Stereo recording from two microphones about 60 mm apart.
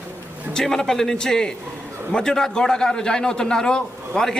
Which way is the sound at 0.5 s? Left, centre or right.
Centre.